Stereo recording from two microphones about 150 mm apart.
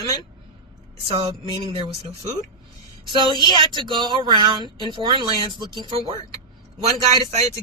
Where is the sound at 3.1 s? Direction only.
30° right (ahead or behind).